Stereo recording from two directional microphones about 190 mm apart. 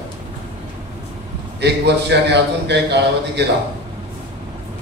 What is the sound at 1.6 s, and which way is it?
A man's voice, 60° right (ahead or behind).